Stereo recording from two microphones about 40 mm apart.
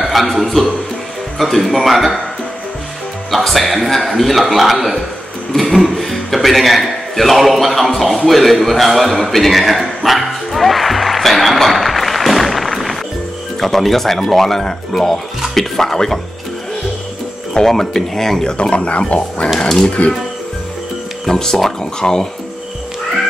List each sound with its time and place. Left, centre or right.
0.0 s a man's voice: centre
3.3 s a man's voice: centre
8.3 s a sound: centre
13.6 s speech: centre
17.6 s speech: centre
18.4 s speech: left
21.3 s speech: centre